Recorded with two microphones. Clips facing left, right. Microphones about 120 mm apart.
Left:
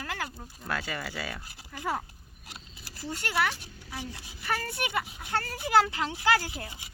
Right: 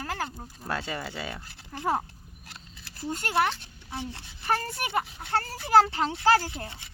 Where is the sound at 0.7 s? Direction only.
25° right (ahead or behind).